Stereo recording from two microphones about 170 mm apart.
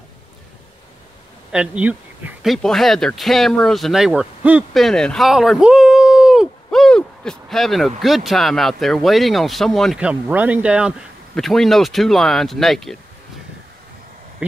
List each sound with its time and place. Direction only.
1.5 s speech: 5° right (ahead or behind)